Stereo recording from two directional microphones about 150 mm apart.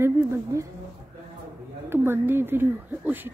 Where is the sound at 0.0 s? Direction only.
20° right (ahead or behind).